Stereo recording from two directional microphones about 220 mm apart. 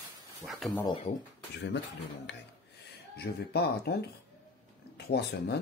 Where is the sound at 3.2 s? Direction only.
50° left (ahead or behind).